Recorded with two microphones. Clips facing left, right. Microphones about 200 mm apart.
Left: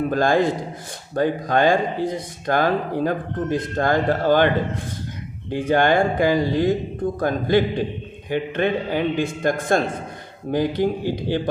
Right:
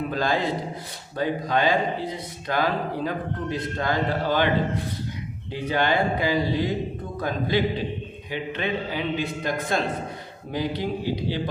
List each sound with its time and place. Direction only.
0.0 s speech: 50° left (ahead or behind)
5.5 s speech: 50° left (ahead or behind)